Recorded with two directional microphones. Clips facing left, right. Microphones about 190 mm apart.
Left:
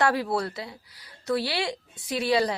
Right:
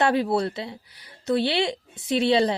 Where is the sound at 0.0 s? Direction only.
20° right (ahead or behind).